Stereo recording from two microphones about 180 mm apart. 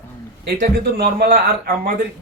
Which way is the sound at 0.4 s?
60° right (ahead or behind).